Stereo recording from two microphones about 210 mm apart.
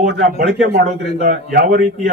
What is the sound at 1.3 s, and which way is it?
Speech, 40° right (ahead or behind).